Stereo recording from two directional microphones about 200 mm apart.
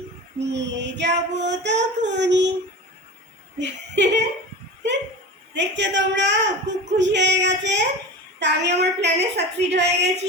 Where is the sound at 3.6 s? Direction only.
60° right (ahead or behind).